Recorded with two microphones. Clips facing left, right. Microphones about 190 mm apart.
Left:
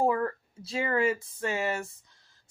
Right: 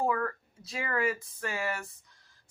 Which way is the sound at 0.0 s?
30° left (ahead or behind).